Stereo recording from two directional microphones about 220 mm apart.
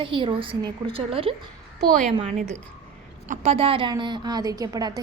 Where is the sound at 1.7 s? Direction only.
35° right (ahead or behind); by 5.0 s 15° right (ahead or behind).